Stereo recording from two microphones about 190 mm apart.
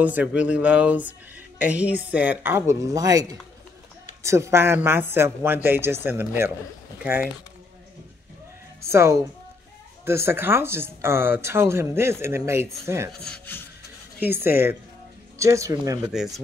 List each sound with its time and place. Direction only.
0.0 s speech: 10° right (ahead or behind)
8.8 s speech: 15° right (ahead or behind)
13.2 s rub: 10° left (ahead or behind)
14.2 s speech: 10° right (ahead or behind)
16.1 s speech: centre (ahead or behind)